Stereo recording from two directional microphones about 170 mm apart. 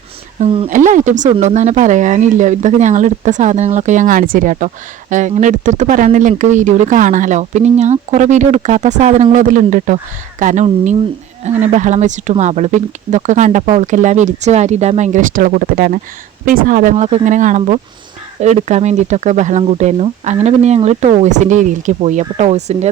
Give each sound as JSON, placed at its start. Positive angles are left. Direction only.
{"t": 0.3, "sound": "speech", "side_deg": -35}
{"t": 0.7, "sound": "speech", "side_deg": -50}